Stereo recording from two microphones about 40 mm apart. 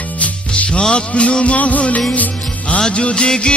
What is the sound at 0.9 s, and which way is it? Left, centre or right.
Music, left.